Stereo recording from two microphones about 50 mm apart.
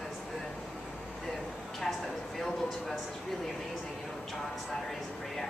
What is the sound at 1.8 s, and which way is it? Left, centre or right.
A woman's voice, centre.